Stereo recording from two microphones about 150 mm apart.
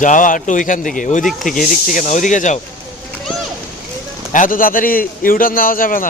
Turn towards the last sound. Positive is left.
turn(degrees=65)  # may be behind; listen again after turning